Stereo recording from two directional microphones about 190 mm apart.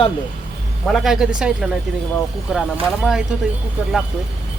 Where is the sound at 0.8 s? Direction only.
Centre (ahead or behind).